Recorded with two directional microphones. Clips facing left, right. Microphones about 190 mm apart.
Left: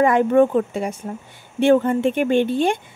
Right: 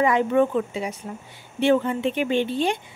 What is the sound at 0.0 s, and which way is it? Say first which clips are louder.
A woman's voice: left 4 dB; 50° left (ahead or behind).